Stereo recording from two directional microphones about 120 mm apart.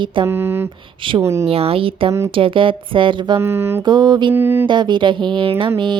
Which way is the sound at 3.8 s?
40° right (ahead or behind).